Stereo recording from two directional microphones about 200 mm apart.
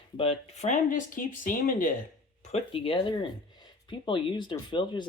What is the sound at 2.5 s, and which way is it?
Speech, 25° left (ahead or behind).